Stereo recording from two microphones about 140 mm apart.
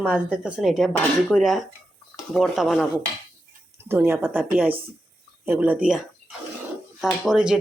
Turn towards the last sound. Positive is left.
turn(degrees=-5)  # may be behind; listen again after turning